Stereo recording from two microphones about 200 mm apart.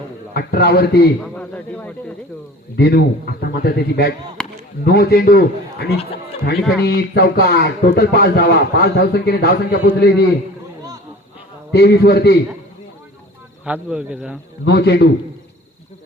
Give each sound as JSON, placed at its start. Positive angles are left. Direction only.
{"t": 0.3, "sound": "speech", "side_deg": 50}
{"t": 1.2, "sound": "a man's voice", "side_deg": 5}
{"t": 2.7, "sound": "speech", "side_deg": 55}
{"t": 4.4, "sound": "chop", "side_deg": 5}
{"t": 4.9, "sound": "speech", "side_deg": 50}
{"t": 11.7, "sound": "speech", "side_deg": 55}
{"t": 13.7, "sound": "speech", "side_deg": -5}
{"t": 14.6, "sound": "a man's voice", "side_deg": 55}